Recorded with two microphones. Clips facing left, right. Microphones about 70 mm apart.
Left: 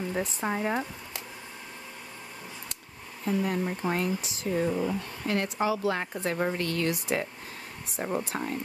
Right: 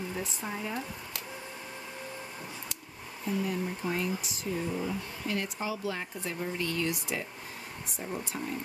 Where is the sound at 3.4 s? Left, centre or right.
Left.